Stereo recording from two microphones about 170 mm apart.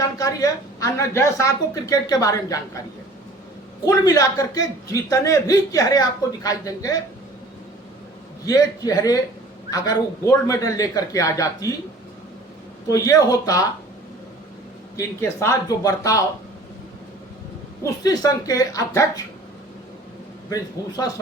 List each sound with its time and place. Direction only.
0.2 s a man's voice: 20° left (ahead or behind)
3.8 s a man's voice: 20° left (ahead or behind)
8.4 s a man's voice: 20° left (ahead or behind)
12.9 s a man's voice: 20° left (ahead or behind)
14.9 s a man's voice: 15° left (ahead or behind)
17.8 s a man's voice: 20° left (ahead or behind)
20.5 s a man's voice: 20° left (ahead or behind)